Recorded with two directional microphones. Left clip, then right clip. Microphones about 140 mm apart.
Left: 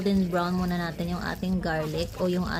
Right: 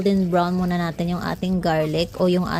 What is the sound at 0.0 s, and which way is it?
Speech, 45° right (ahead or behind).